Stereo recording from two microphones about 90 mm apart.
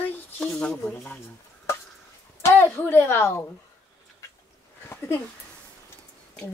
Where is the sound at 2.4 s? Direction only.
30° left (ahead or behind).